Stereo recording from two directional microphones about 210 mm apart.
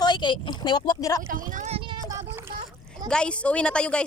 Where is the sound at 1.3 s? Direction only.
40° right (ahead or behind).